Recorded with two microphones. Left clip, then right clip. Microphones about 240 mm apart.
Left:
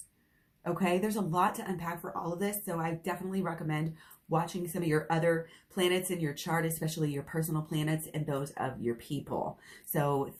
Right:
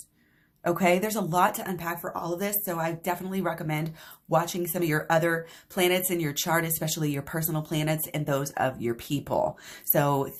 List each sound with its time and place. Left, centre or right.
0.6 s speech: right